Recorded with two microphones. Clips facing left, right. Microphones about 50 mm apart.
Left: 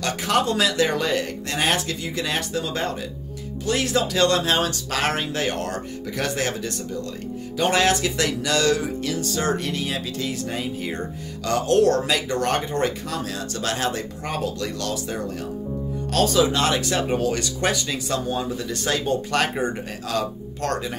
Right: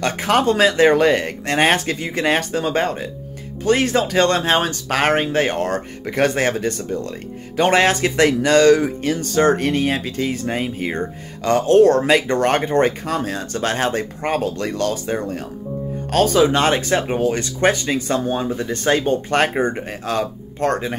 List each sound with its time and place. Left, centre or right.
0.0 s speech: right
17.1 s speech: right